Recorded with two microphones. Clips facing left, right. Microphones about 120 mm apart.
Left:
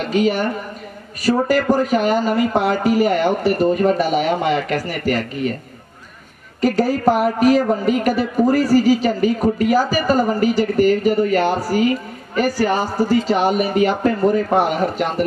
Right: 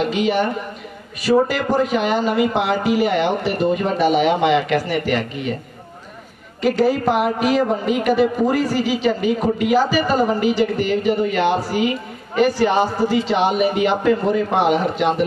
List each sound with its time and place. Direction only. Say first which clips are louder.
0.1 s a woman's voice: left 1 dB; 40° left (ahead or behind)
6.6 s a woman's voice: left 1 dB; 40° left (ahead or behind)